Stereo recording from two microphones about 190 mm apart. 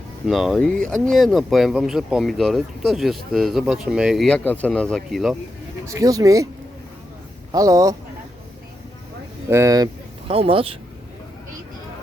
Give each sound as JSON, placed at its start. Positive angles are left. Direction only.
{"t": 0.3, "sound": "speech", "side_deg": 0}
{"t": 5.8, "sound": "speech", "side_deg": -15}
{"t": 7.5, "sound": "speech", "side_deg": -20}
{"t": 9.5, "sound": "speech", "side_deg": -15}